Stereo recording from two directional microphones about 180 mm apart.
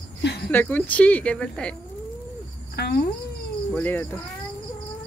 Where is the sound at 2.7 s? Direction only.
65° left (ahead or behind).